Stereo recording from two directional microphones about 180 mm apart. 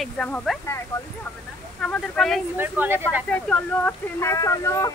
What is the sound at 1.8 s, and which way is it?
Speech, 5° left (ahead or behind).